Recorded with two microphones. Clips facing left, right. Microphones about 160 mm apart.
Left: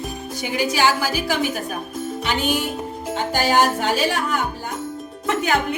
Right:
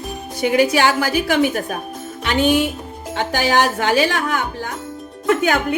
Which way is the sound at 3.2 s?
75° right (ahead or behind).